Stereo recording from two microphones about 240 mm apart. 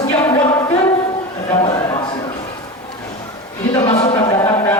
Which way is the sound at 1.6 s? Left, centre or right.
Left.